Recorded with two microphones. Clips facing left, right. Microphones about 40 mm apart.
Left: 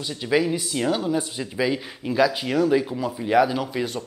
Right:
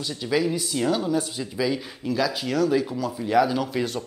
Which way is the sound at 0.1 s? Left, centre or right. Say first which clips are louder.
Left 2 dB; centre.